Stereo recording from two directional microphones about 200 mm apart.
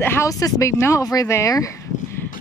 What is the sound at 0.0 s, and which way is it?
Speech, 15° left (ahead or behind).